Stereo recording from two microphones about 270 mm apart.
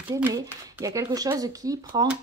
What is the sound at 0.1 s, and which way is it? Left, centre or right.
Speech, centre.